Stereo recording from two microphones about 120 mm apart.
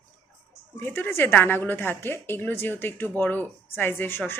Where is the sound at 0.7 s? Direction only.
15° left (ahead or behind).